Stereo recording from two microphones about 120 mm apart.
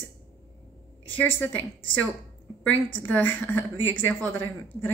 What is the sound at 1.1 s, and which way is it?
A woman's voice, 15° left (ahead or behind).